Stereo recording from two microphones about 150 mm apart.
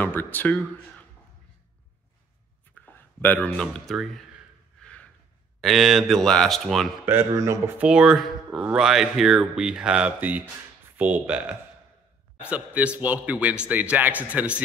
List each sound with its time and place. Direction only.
0.0 s speech: 10° left (ahead or behind)
2.7 s speech: 15° left (ahead or behind)
5.6 s speech: centre (ahead or behind)
7.1 s a man's voice: 15° right (ahead or behind)
7.8 s a man's voice: 5° right (ahead or behind)